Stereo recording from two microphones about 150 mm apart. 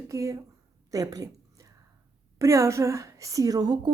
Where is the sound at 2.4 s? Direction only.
20° right (ahead or behind).